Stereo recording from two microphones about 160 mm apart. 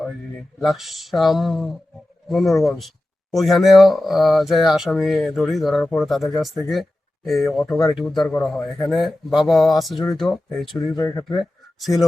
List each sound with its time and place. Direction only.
0.6 s speech: centre (ahead or behind)
10.7 s speech: 25° left (ahead or behind)
11.8 s speech: centre (ahead or behind)